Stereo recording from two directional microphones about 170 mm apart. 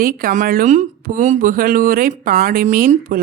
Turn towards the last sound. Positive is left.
turn(degrees=-55)  # may be behind; listen again after turning